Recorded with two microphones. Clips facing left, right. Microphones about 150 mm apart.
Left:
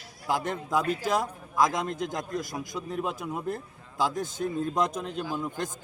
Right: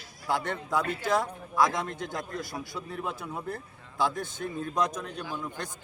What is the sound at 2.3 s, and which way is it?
A man's voice, 20° left (ahead or behind).